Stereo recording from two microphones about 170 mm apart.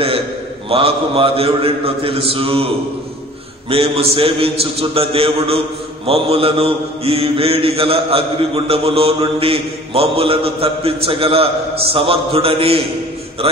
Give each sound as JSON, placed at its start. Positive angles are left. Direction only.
{"t": 0.7, "sound": "mantra", "side_deg": -35}
{"t": 3.7, "sound": "mantra", "side_deg": -35}